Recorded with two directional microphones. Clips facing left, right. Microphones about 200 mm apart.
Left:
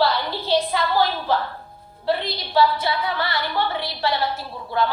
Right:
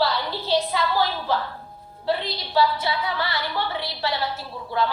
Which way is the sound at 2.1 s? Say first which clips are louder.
Left 2 dB; 55° left (ahead or behind).